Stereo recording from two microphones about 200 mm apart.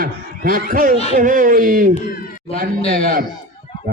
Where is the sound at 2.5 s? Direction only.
30° left (ahead or behind).